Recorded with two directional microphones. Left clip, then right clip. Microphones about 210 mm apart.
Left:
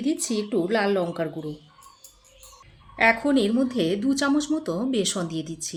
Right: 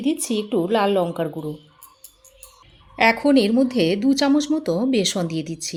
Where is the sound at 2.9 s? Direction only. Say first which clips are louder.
Right 4 dB; 30° right (ahead or behind).